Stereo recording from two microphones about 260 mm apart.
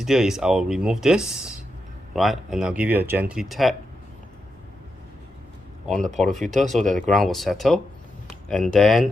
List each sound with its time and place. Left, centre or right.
0.0 s speech: centre
5.9 s speech: centre
6.8 s speech: right
7.1 s speech: centre